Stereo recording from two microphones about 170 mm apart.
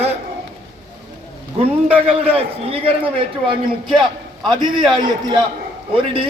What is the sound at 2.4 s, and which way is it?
A man's voice, 35° right (ahead or behind).